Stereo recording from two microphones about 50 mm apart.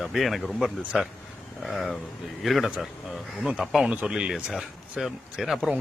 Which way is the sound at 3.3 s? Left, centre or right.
Centre.